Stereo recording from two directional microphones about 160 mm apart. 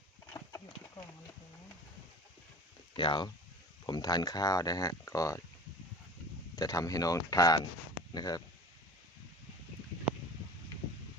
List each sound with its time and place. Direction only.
0.3 s a sound: 15° left (ahead or behind)
2.9 s speech: 30° left (ahead or behind)
6.6 s speech: 20° left (ahead or behind)